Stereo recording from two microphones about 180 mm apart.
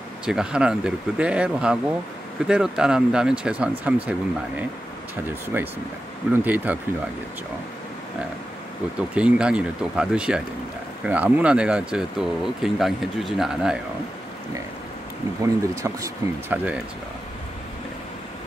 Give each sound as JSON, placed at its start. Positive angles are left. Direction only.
{"t": 0.2, "sound": "speech", "side_deg": -5}
{"t": 9.1, "sound": "speech", "side_deg": -5}
{"t": 15.4, "sound": "speech", "side_deg": -20}